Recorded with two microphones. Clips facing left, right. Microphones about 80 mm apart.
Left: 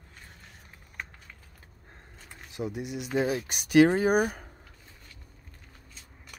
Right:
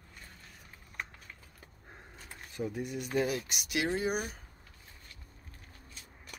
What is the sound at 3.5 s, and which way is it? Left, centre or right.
Speech, left.